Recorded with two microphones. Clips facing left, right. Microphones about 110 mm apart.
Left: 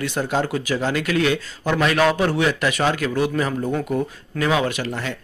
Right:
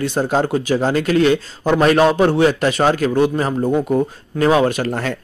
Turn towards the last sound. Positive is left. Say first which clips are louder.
# right 6 dB
turn(degrees=-40)  # may be behind; listen again after turning